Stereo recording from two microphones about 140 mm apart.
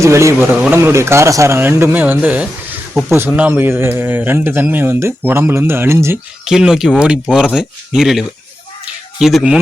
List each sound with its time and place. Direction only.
0.0 s speech: 20° right (ahead or behind)
6.4 s speech: 5° right (ahead or behind)